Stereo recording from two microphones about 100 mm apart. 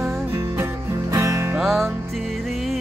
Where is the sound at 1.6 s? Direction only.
Centre (ahead or behind).